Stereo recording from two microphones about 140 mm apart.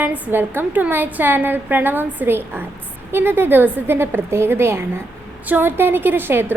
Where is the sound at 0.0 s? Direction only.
15° right (ahead or behind).